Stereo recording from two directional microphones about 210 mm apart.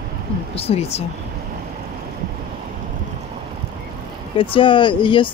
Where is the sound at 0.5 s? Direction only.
30° left (ahead or behind).